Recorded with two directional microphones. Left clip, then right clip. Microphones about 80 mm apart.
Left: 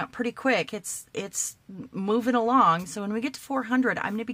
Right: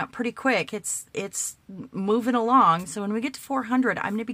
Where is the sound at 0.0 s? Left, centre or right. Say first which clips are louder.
Right 1 dB; right.